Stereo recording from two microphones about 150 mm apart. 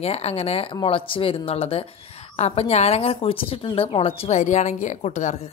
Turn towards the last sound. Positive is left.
turn(degrees=50)  # may be behind; listen again after turning